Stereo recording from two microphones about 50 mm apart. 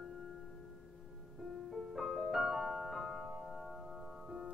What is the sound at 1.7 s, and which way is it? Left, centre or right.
Music, centre.